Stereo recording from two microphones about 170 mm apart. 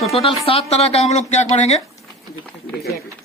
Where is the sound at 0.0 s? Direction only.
35° left (ahead or behind).